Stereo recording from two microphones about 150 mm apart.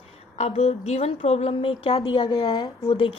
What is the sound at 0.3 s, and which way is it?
A woman's voice, 50° left (ahead or behind).